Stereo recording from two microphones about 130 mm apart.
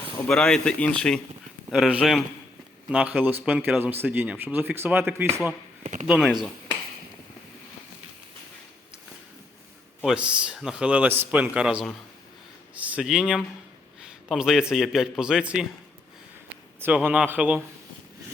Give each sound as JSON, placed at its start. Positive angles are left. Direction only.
{"t": 0.3, "sound": "speech", "side_deg": 5}
{"t": 1.7, "sound": "a man's voice", "side_deg": -5}
{"t": 5.8, "sound": "speech", "side_deg": -70}
{"t": 6.1, "sound": "a man's voice", "side_deg": -5}
{"t": 10.0, "sound": "a man's voice", "side_deg": -5}
{"t": 16.8, "sound": "speech", "side_deg": -10}